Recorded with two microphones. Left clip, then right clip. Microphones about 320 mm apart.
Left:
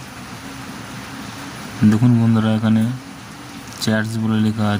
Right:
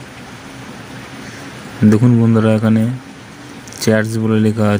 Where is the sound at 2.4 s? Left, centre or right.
Centre.